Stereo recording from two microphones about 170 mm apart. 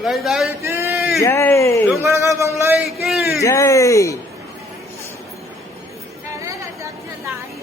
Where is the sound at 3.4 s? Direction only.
20° left (ahead or behind).